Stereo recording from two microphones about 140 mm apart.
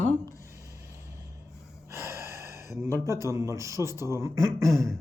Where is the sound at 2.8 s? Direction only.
20° right (ahead or behind).